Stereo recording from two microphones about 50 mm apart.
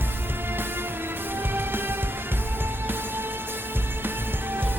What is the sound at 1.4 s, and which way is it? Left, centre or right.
Music, right.